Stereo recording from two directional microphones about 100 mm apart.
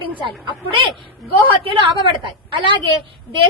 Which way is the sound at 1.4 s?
60° right (ahead or behind).